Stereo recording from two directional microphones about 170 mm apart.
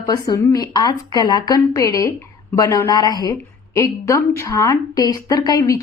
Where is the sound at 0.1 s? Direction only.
25° left (ahead or behind).